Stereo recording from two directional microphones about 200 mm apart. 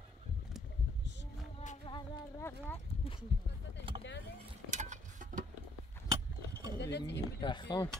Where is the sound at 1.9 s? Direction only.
15° left (ahead or behind).